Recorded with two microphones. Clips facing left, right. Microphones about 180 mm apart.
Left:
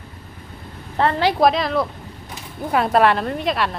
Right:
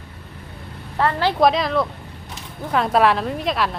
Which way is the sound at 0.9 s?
25° left (ahead or behind).